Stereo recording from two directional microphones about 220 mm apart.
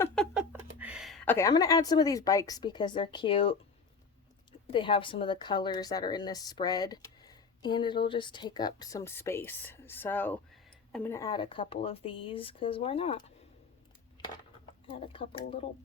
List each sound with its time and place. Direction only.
0.3 s speech: 5° right (ahead or behind); by 3.6 s 25° left (ahead or behind)
4.7 s speech: 25° left (ahead or behind)
14.8 s speech: 25° left (ahead or behind)